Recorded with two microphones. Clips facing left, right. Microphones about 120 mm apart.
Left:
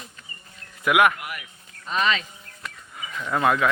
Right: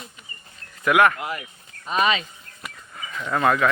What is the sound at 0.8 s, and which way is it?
Speech, 10° left (ahead or behind).